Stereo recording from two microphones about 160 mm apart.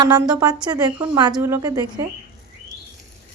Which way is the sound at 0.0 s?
25° right (ahead or behind).